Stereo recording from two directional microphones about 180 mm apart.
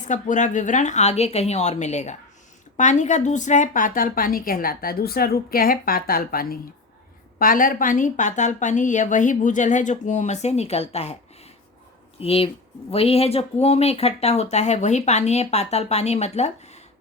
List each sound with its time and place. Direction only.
0.0 s a woman's voice: 45° left (ahead or behind)
12.2 s speech: 30° left (ahead or behind)